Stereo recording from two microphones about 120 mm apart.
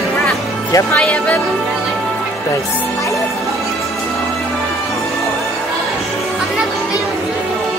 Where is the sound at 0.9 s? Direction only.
10° left (ahead or behind).